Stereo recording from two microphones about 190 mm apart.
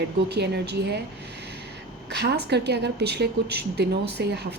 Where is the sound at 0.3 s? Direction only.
60° right (ahead or behind).